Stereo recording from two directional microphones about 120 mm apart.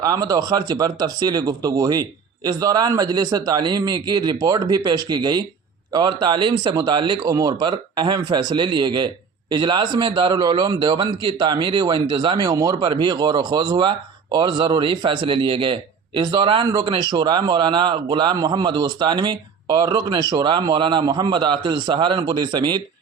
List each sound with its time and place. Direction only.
0.0 s a man's voice: 30° right (ahead or behind)